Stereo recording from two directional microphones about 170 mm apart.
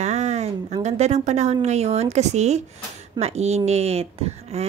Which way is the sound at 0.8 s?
40° right (ahead or behind).